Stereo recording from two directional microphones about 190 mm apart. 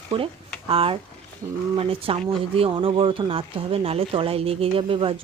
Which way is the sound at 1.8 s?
30° right (ahead or behind).